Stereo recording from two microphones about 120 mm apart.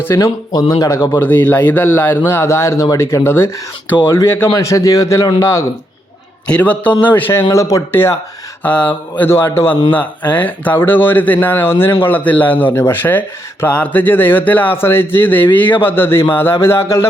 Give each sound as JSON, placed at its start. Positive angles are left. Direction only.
{"t": 0.0, "sound": "a man's voice", "side_deg": 20}
{"t": 0.5, "sound": "speech", "side_deg": 35}
{"t": 1.2, "sound": "a man's voice", "side_deg": 15}
{"t": 6.5, "sound": "a man's voice", "side_deg": 10}